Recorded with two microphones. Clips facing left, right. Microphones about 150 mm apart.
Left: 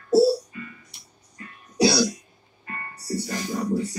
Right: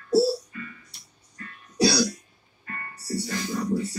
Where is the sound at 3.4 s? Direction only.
15° left (ahead or behind).